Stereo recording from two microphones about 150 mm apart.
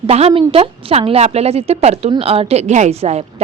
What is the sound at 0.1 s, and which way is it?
A woman's voice, 40° right (ahead or behind).